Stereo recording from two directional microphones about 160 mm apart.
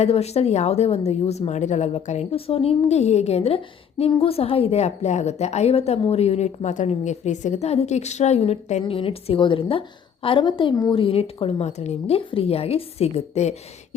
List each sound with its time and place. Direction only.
0.0 s a woman's voice: 40° left (ahead or behind)
11.0 s speech: 40° left (ahead or behind)